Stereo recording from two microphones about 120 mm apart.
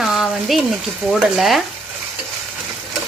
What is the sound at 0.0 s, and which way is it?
Frying, 5° right (ahead or behind).